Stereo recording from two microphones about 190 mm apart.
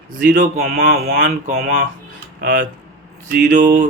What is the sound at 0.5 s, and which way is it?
Speech, 50° right (ahead or behind).